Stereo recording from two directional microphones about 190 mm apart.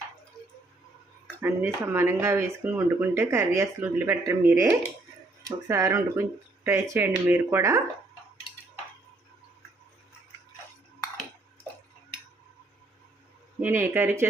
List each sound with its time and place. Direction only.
1.4 s speech: 15° right (ahead or behind)
13.6 s speech: 10° right (ahead or behind)